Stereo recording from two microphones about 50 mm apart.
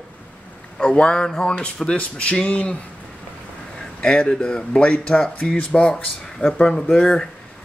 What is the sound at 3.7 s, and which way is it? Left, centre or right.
A man's voice, left.